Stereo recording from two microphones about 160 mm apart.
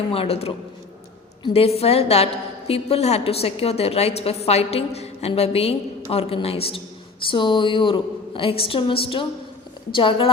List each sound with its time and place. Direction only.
0.1 s a woman's voice: 35° left (ahead or behind)
1.5 s a woman's voice: 40° left (ahead or behind)